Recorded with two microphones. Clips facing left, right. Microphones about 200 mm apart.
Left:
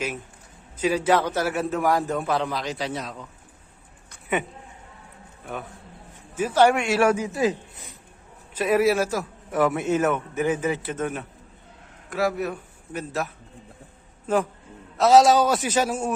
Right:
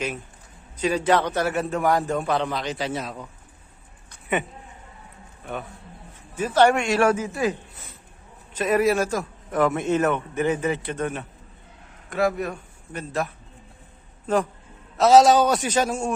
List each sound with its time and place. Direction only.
0.8 s a man's voice: 5° left (ahead or behind)
6.3 s a man's voice: 10° left (ahead or behind)
8.5 s a man's voice: 10° left (ahead or behind)
14.9 s a man's voice: centre (ahead or behind)